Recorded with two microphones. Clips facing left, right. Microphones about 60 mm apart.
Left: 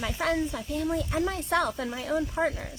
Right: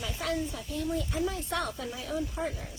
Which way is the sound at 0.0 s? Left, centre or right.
Left.